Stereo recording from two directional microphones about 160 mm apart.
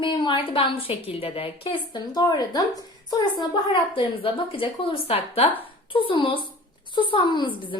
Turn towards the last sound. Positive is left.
turn(degrees=30)  # may be behind; listen again after turning